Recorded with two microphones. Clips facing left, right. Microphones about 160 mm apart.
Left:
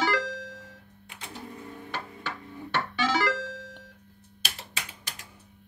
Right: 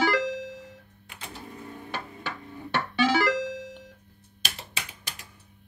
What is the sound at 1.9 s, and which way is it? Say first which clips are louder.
Music: right 1 dB; 15° right (ahead or behind).